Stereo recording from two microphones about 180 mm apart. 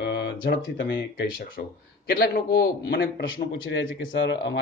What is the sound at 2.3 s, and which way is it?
Speech, 60° left (ahead or behind).